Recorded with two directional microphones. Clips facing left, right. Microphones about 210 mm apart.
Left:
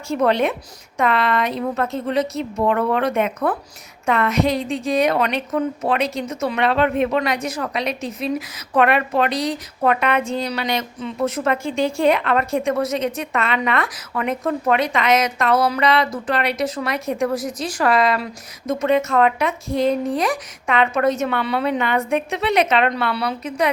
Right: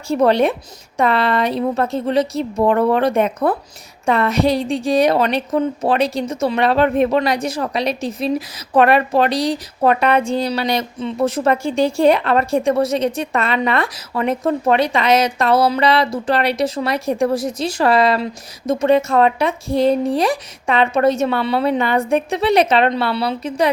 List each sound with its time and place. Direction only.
0.1 s a woman's voice: 35° right (ahead or behind)